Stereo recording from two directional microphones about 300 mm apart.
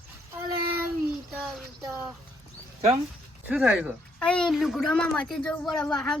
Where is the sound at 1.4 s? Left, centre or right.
Centre.